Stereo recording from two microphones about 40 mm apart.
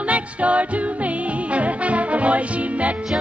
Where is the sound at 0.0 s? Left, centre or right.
Right.